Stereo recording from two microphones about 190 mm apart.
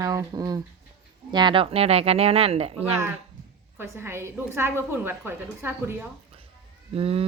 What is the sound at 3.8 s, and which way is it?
A woman's voice, 15° right (ahead or behind).